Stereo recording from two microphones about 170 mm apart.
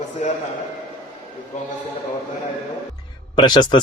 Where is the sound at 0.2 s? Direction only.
40° left (ahead or behind).